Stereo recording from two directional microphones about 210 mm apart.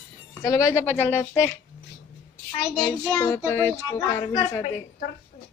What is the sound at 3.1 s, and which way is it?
Speech, 15° left (ahead or behind).